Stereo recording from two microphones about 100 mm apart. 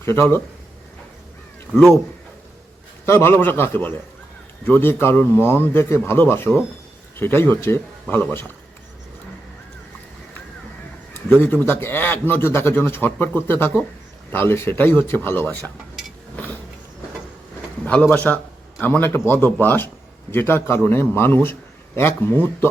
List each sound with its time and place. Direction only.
0.0 s a man's voice: 25° left (ahead or behind)
1.7 s speech: 10° left (ahead or behind)
3.1 s a man's voice: 25° left (ahead or behind)
11.3 s a man's voice: 20° left (ahead or behind)
16.3 s vehicle: 15° left (ahead or behind)
17.8 s a man's voice: 15° left (ahead or behind)